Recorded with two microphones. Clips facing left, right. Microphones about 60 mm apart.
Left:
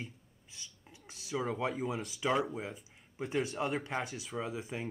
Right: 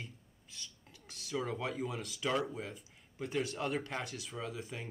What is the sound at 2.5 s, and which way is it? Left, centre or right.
Speech, centre.